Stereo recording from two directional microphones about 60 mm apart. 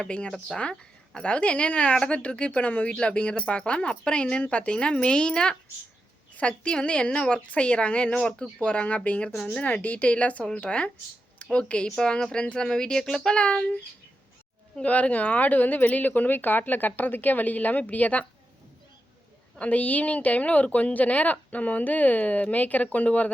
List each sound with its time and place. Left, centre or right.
0.0 s a woman's voice: centre
9.3 s a woman's voice: centre
9.6 s a woman's voice: left
11.9 s a woman's voice: centre
12.1 s speech: centre
14.8 s a woman's voice: left
19.5 s a woman's voice: left